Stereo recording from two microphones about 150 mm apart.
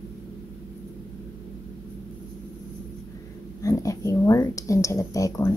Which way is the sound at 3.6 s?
20° left (ahead or behind).